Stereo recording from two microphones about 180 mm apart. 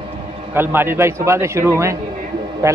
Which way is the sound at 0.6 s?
10° right (ahead or behind).